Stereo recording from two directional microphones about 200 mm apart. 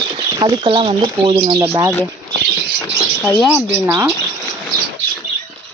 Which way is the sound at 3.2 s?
5° left (ahead or behind).